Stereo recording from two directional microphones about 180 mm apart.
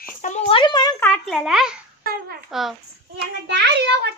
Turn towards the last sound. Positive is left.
turn(degrees=-70)  # may be behind; listen again after turning